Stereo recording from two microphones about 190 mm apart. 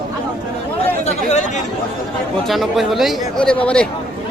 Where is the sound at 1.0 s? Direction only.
35° left (ahead or behind).